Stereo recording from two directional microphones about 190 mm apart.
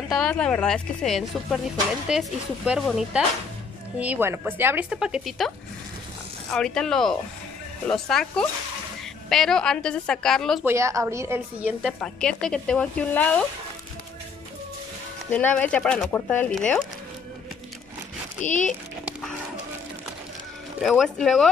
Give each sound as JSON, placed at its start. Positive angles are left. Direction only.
{"t": 0.1, "sound": "speech", "side_deg": 5}
{"t": 6.5, "sound": "speech", "side_deg": 5}
{"t": 10.6, "sound": "speech", "side_deg": -15}
{"t": 11.8, "sound": "speech", "side_deg": 5}
{"t": 15.3, "sound": "speech", "side_deg": 5}
{"t": 18.4, "sound": "speech", "side_deg": 40}
{"t": 20.8, "sound": "speech", "side_deg": 0}